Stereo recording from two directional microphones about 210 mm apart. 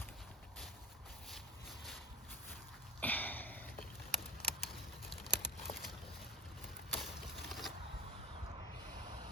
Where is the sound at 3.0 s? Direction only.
10° left (ahead or behind).